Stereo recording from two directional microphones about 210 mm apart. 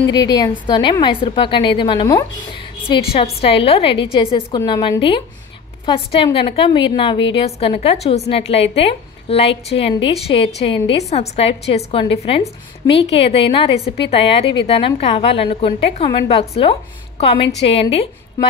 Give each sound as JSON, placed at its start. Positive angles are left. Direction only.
{"t": 0.1, "sound": "a woman's voice", "side_deg": 20}